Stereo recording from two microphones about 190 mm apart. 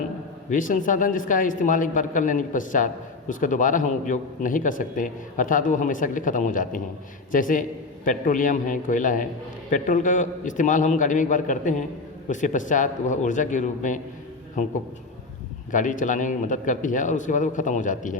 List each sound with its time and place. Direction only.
0.5 s a man's voice: 45° left (ahead or behind)
15.7 s a man's voice: 40° left (ahead or behind)